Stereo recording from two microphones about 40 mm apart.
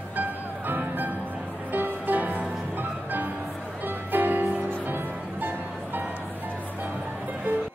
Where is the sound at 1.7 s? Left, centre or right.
Right.